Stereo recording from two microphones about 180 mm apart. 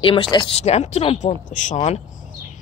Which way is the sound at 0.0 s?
30° left (ahead or behind).